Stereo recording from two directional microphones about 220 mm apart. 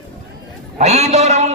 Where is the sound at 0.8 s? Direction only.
30° right (ahead or behind).